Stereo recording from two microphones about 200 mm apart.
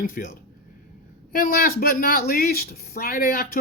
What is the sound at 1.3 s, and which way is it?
Speech, 45° left (ahead or behind).